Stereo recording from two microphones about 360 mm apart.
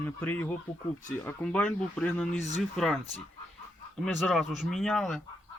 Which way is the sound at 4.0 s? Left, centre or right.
Centre.